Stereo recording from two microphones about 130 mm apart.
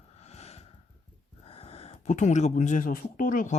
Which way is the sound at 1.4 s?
50° left (ahead or behind).